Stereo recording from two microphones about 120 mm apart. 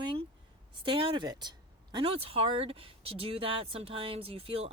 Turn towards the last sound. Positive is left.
turn(degrees=-55)  # may be behind; listen again after turning